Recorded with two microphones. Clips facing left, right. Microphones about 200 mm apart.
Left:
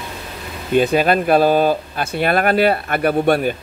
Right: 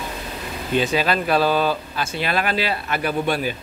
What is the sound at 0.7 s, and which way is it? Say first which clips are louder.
Speech: left 6 dB; 50° left (ahead or behind).